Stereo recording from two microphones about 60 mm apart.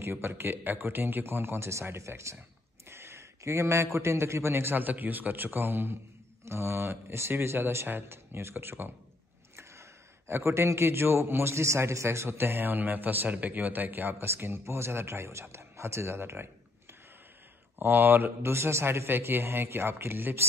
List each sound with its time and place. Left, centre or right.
0.0 s a man's voice: right
6.4 s a man's voice: right
12.3 s a man's voice: right
14.1 s a man's voice: right
17.7 s a man's voice: right